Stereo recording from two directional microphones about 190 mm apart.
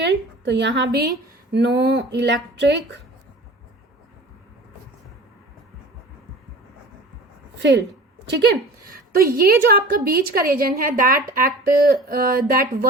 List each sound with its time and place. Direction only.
0.0 s a woman's voice: 65° right (ahead or behind)
7.6 s a woman's voice: 70° right (ahead or behind)
8.3 s a woman's voice: 60° right (ahead or behind)